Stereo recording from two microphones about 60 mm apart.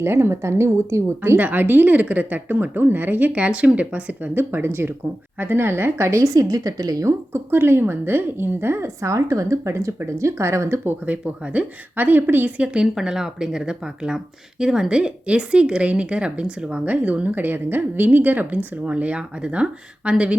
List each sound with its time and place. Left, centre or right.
0.0 s a woman's voice: right
1.4 s speech: right
3.3 s speech: centre
4.4 s speech: right
7.3 s speech: right
9.0 s a woman's voice: right
10.8 s speech: right
12.5 s speech: centre